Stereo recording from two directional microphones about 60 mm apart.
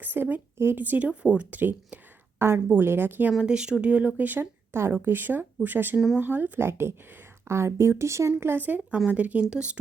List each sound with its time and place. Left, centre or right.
0.0 s speech: right
1.5 s speech: right
3.4 s speech: centre; by 8.3 s right
8.4 s speech: right; by 9.7 s centre